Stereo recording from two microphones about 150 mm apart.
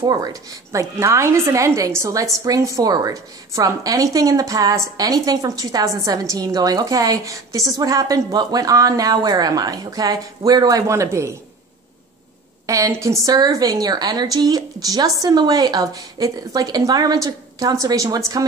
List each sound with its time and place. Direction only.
0.0 s a woman's voice: 25° right (ahead or behind)
12.6 s a woman's voice: 20° right (ahead or behind)